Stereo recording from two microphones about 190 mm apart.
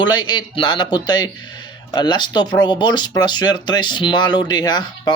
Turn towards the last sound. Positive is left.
turn(degrees=20)  # may be behind; listen again after turning